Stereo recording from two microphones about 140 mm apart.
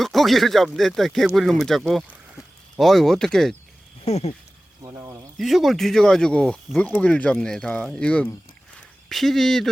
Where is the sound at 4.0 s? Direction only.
50° left (ahead or behind).